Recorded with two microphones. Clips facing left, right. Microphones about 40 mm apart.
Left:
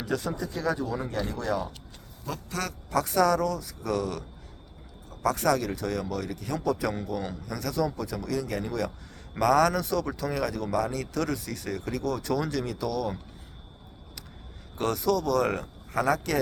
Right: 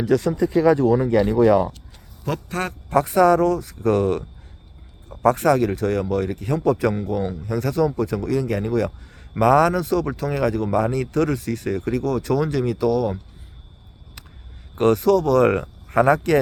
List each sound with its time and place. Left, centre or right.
0.3 s speech: right
2.2 s speech: right; by 7.6 s centre
7.6 s speech: right
14.8 s speech: right